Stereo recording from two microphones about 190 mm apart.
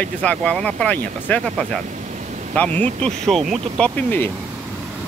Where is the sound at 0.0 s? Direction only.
5° left (ahead or behind).